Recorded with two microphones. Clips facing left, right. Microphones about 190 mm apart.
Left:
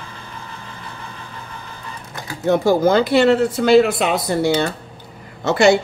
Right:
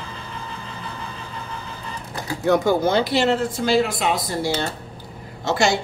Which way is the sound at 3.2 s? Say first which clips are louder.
Left 6 dB; 65° left (ahead or behind).